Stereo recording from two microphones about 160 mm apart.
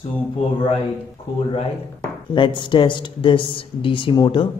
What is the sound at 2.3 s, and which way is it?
Speech, 30° left (ahead or behind).